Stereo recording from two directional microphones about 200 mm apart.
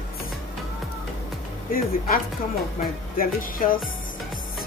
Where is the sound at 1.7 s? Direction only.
45° left (ahead or behind).